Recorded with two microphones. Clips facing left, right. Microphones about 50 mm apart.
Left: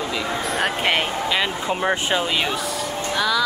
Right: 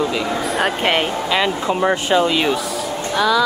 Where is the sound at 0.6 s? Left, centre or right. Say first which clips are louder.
Right 3 dB; centre.